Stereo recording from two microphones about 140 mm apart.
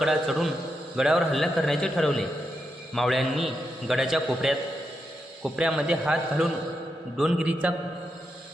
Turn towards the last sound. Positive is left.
turn(degrees=-10)  # may be behind; listen again after turning